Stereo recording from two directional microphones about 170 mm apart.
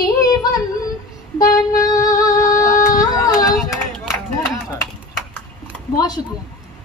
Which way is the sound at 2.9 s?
20° left (ahead or behind).